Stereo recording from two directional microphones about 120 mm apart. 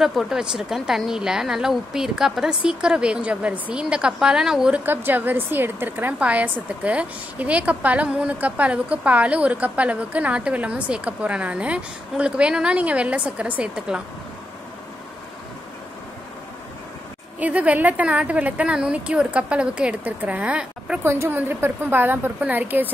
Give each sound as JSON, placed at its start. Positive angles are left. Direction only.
{"t": 0.0, "sound": "a woman's voice", "side_deg": -5}
{"t": 17.4, "sound": "a woman's voice", "side_deg": -10}
{"t": 21.0, "sound": "a woman's voice", "side_deg": -20}